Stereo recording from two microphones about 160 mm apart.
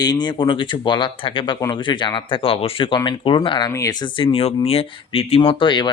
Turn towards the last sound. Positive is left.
turn(degrees=30)  # may be behind; listen again after turning